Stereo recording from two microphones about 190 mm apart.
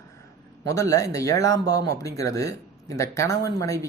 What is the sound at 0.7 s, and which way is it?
Speech, 15° left (ahead or behind).